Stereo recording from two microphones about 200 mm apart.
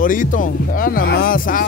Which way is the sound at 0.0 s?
40° left (ahead or behind).